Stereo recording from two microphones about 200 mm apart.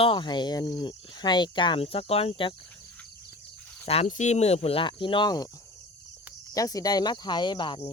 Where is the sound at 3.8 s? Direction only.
30° left (ahead or behind).